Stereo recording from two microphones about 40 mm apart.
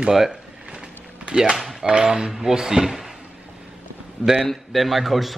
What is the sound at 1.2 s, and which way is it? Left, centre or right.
Speech, right.